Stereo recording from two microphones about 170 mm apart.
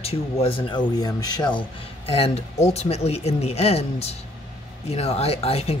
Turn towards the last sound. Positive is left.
turn(degrees=35)  # may be behind; listen again after turning